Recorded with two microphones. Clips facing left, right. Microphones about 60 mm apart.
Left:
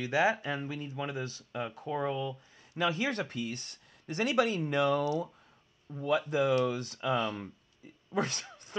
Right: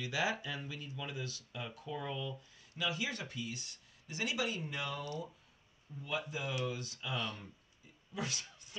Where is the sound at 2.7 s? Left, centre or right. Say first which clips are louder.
Left 8 dB; left.